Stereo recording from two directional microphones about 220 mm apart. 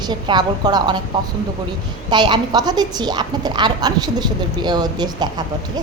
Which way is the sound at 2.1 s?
20° right (ahead or behind).